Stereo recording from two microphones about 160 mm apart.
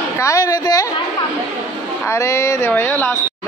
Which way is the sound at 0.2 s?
20° left (ahead or behind).